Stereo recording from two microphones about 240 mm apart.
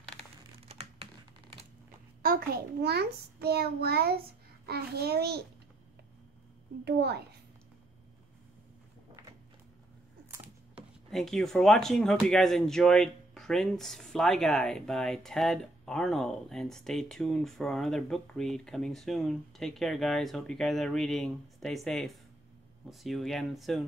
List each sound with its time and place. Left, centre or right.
0.2 s crumpling: right
2.2 s a child's voice: right
6.8 s a child's voice: right
11.1 s speech: centre